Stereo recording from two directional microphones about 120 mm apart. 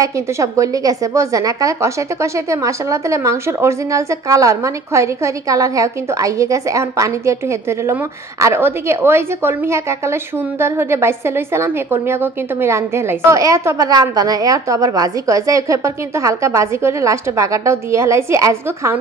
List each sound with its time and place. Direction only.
0.0 s speech: 25° right (ahead or behind)